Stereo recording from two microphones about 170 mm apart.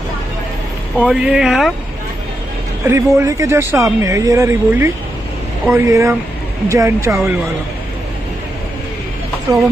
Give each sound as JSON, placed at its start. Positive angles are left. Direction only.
{"t": 1.0, "sound": "speech", "side_deg": -5}
{"t": 2.8, "sound": "speech", "side_deg": -15}